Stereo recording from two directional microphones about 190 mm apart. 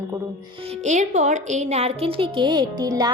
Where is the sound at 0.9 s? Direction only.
40° right (ahead or behind).